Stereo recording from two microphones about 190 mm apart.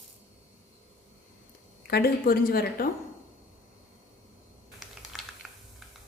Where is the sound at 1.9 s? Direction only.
55° left (ahead or behind).